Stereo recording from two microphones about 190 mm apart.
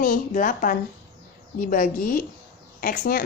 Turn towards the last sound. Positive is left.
turn(degrees=50)  # may be behind; listen again after turning